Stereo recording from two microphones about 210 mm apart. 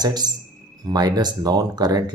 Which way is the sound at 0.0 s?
20° right (ahead or behind).